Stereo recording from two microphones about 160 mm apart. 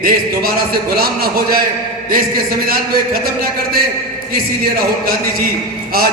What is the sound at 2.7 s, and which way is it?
A man's voice, 65° right (ahead or behind).